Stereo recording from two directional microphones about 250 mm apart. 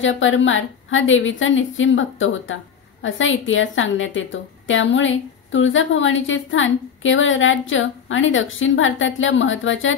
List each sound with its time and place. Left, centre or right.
0.0 s a woman's voice: left